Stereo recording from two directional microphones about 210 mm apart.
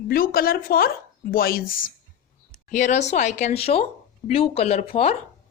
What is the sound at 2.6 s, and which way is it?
Speech, 35° left (ahead or behind).